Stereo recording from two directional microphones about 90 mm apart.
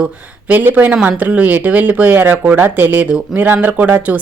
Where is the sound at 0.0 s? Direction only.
15° right (ahead or behind).